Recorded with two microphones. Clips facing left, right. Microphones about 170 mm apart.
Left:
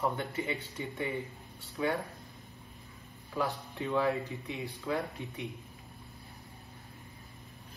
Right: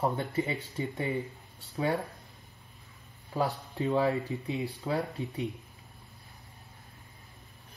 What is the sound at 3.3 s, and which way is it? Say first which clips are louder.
Speech: right 3 dB; 35° right (ahead or behind).